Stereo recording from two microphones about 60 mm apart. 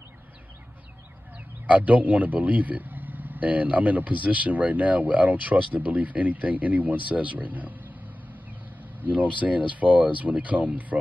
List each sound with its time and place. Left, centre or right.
1.7 s a man's voice: right
9.0 s a man's voice: right